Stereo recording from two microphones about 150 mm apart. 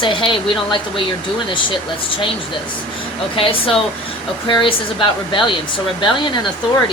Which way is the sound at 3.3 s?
35° left (ahead or behind).